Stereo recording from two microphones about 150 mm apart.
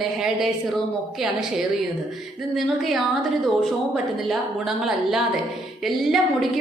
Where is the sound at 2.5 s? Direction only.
Centre (ahead or behind).